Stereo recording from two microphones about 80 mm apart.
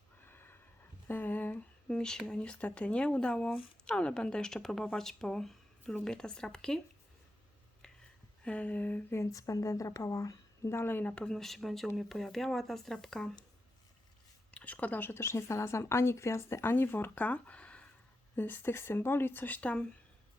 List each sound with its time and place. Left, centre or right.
0.2 s a sound: left
2.0 s speech: centre
8.4 s speech: centre
9.1 s a woman's voice: left
10.7 s speech: left
11.1 s speech: centre
14.5 s speech: centre